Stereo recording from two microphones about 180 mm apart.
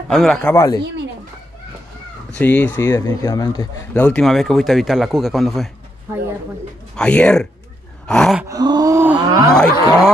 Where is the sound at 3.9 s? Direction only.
10° left (ahead or behind).